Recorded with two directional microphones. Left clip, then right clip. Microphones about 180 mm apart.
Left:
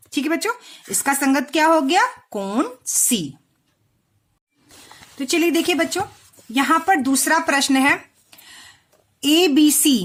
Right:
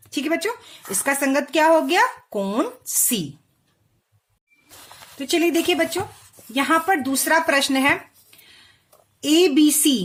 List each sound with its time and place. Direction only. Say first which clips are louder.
0.1 s speech: left 2 dB; 25° left (ahead or behind)
5.1 s a woman's voice: left 1 dB; 30° left (ahead or behind)